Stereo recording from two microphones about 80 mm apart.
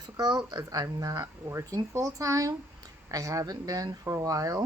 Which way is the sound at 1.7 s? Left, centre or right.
Right.